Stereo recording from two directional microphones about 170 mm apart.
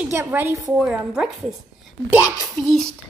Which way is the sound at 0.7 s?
5° right (ahead or behind).